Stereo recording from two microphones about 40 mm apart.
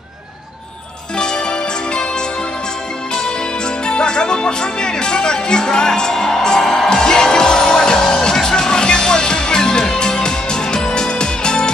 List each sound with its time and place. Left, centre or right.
1.1 s music: centre